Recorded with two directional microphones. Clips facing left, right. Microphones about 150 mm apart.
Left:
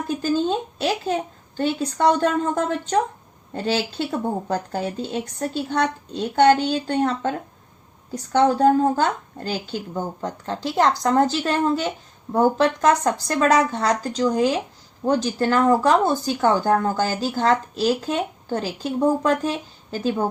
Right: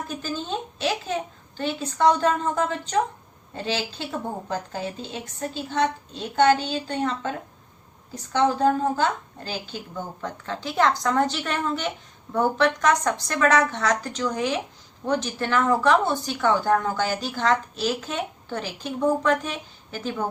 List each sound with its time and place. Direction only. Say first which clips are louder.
0.4 s speech: left 5 dB; 40° left (ahead or behind)